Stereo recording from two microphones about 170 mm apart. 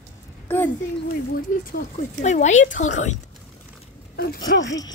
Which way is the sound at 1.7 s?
50° left (ahead or behind).